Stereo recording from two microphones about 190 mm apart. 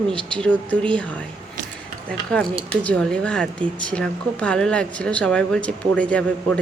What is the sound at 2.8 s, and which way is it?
A woman's voice, 5° left (ahead or behind).